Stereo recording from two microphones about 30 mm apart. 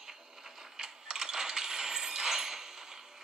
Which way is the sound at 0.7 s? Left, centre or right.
Right.